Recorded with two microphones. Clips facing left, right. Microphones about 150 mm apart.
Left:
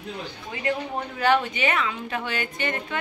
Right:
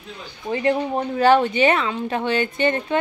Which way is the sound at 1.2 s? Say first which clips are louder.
Right 6 dB; 35° right (ahead or behind).